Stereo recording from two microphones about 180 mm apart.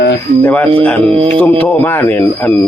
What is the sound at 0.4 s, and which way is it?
Speech, 10° left (ahead or behind).